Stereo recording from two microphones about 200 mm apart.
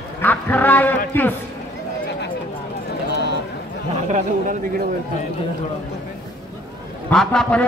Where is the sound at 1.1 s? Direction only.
10° left (ahead or behind).